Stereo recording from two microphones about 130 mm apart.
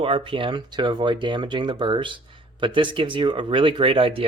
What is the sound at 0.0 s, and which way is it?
Speech, 40° right (ahead or behind).